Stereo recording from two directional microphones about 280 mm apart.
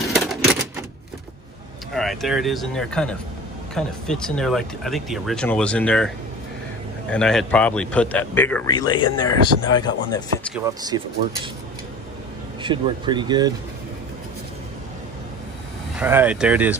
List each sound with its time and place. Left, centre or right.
0.1 s typewriter: centre
2.0 s speech: centre
10.7 s speech: centre
12.6 s speech: centre
16.0 s speech: centre